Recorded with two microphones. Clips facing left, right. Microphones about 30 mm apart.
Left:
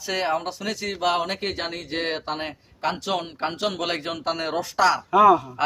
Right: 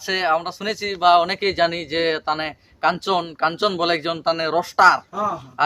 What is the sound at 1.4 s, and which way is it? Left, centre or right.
Speech, right.